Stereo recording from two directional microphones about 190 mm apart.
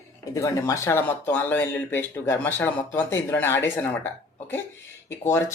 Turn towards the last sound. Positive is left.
turn(degrees=10)  # may be behind; listen again after turning